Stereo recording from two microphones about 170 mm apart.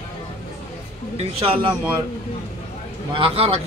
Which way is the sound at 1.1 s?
35° right (ahead or behind).